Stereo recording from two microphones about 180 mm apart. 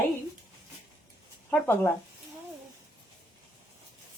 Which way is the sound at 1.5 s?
10° left (ahead or behind).